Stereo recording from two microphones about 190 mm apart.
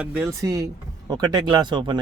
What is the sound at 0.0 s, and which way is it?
Speech, 10° right (ahead or behind).